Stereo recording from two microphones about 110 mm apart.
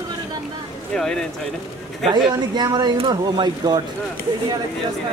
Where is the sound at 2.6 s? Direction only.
40° right (ahead or behind).